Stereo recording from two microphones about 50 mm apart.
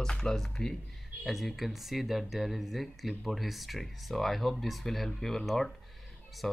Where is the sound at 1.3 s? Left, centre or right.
Centre.